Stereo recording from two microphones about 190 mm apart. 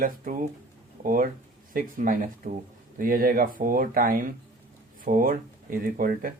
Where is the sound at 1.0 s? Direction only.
45° right (ahead or behind).